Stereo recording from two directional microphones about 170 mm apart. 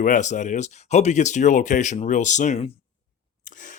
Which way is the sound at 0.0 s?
50° left (ahead or behind).